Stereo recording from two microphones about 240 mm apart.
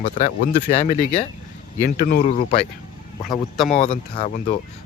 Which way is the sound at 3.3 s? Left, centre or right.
Centre.